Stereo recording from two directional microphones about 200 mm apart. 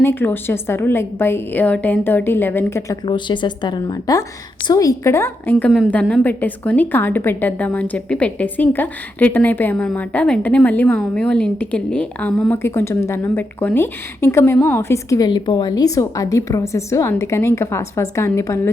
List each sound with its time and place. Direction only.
0.0 s a woman's voice: 10° left (ahead or behind)
3.1 s a woman's voice: 25° left (ahead or behind)